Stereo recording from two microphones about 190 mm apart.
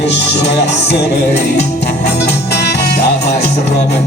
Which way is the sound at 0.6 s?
60° left (ahead or behind).